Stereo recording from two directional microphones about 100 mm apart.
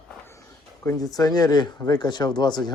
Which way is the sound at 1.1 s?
40° left (ahead or behind).